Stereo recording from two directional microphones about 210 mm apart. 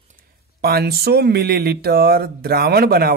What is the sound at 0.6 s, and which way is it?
Speech, 50° right (ahead or behind).